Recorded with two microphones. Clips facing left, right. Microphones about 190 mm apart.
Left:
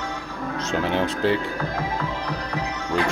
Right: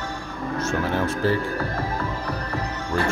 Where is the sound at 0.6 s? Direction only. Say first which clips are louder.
Left 1 dB; 20° left (ahead or behind).